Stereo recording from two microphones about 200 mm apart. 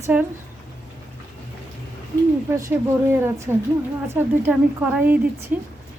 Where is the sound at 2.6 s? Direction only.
15° right (ahead or behind).